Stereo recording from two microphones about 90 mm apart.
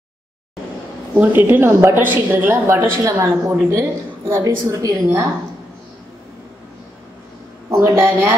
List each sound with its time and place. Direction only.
1.2 s a woman's voice: 20° right (ahead or behind)
7.7 s a woman's voice: 30° right (ahead or behind)